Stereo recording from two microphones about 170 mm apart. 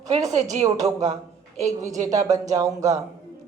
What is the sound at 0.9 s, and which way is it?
Speech, 40° right (ahead or behind).